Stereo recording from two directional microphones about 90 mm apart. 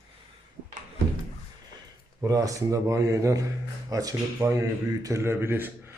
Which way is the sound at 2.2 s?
40° right (ahead or behind).